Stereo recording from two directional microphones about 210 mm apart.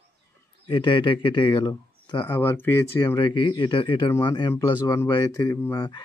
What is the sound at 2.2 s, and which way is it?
Speech, 10° left (ahead or behind).